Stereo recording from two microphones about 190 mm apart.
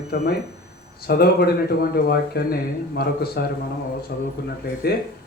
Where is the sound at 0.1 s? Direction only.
60° left (ahead or behind).